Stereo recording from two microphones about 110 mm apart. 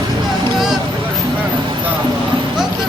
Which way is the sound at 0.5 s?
5° right (ahead or behind).